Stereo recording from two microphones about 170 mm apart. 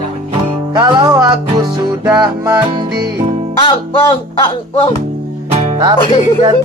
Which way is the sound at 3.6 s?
30° left (ahead or behind).